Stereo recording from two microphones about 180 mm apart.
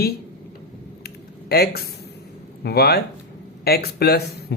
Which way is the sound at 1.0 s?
60° left (ahead or behind).